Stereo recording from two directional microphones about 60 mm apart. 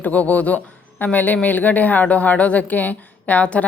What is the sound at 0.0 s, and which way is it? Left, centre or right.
A woman's voice, left.